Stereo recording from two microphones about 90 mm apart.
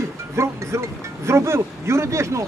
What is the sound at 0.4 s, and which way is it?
Speech, 30° right (ahead or behind).